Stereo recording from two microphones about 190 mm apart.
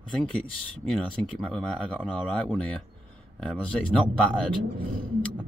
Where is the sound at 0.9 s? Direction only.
5° left (ahead or behind).